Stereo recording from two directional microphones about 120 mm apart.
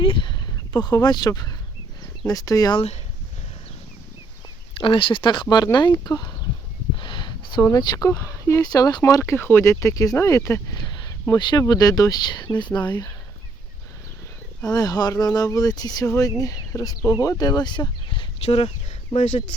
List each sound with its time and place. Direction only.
0.0 s a sound: 45° left (ahead or behind)
2.2 s speech: 30° left (ahead or behind)
2.7 s speech: 65° left (ahead or behind)
4.7 s speech: 50° left (ahead or behind)
7.0 s a sound: 40° left (ahead or behind)
7.6 s speech: 30° left (ahead or behind)
14.6 s speech: 30° left (ahead or behind)
18.4 s speech: 55° left (ahead or behind)
19.1 s speech: 75° left (ahead or behind)